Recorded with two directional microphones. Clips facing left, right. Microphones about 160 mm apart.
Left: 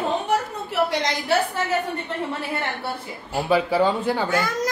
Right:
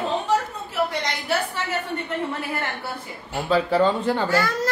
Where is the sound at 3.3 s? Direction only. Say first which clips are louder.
Even; 10° left (ahead or behind).